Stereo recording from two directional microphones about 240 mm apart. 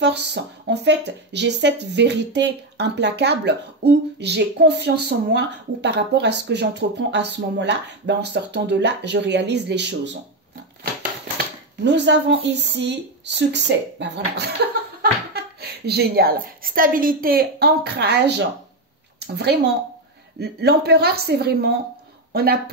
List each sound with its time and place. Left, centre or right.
0.0 s speech: right
11.8 s a woman's voice: right